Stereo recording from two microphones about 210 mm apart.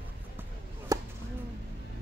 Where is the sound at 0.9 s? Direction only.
15° right (ahead or behind).